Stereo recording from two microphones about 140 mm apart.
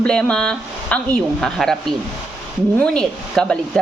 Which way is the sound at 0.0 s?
5° left (ahead or behind).